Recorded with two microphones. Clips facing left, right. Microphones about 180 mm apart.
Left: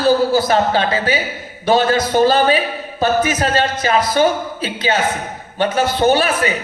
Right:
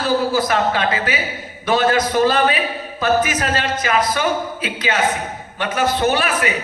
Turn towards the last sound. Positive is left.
turn(degrees=30)  # may be behind; listen again after turning